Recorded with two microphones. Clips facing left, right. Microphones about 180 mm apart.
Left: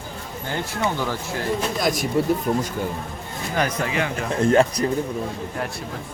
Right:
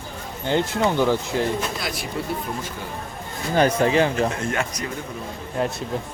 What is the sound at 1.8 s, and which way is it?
Speech, 45° left (ahead or behind).